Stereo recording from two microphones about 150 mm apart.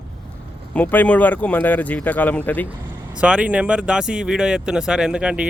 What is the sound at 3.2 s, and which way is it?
A man's voice, 5° right (ahead or behind).